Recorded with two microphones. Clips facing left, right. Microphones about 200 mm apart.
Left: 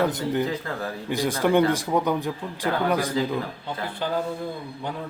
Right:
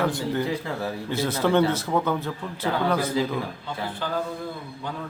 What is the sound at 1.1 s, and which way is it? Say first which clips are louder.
Speech: left 1 dB; 15° left (ahead or behind).